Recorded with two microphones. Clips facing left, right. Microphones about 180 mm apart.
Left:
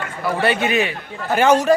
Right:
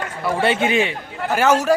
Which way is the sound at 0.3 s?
25° right (ahead or behind).